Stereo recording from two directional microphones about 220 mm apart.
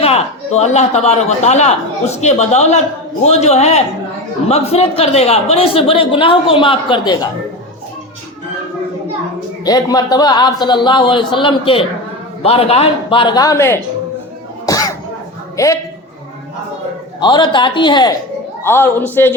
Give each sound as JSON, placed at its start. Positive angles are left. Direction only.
{"t": 0.0, "sound": "a man's voice", "side_deg": 30}
{"t": 9.6, "sound": "a man's voice", "side_deg": 15}
{"t": 14.7, "sound": "cough", "side_deg": 15}
{"t": 15.5, "sound": "a man's voice", "side_deg": 15}
{"t": 17.2, "sound": "a man's voice", "side_deg": 20}
{"t": 18.6, "sound": "a man's voice", "side_deg": 10}